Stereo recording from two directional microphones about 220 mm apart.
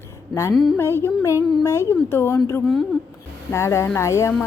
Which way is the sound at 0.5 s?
Centre (ahead or behind).